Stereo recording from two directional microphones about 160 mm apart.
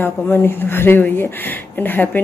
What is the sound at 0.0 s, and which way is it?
A woman's voice, 15° left (ahead or behind).